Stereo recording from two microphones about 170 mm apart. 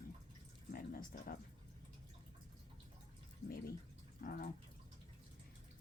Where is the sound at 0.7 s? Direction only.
60° left (ahead or behind).